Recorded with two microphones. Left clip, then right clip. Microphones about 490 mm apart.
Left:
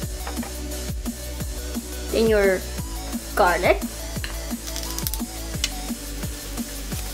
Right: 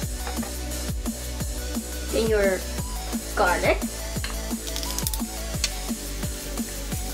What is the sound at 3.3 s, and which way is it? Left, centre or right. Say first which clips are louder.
Speech: left 3 dB; centre.